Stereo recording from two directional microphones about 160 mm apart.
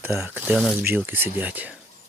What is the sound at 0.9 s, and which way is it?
Speech, 10° right (ahead or behind).